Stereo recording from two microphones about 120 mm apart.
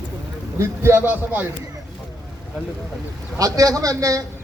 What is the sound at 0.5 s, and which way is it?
Speech, 20° right (ahead or behind).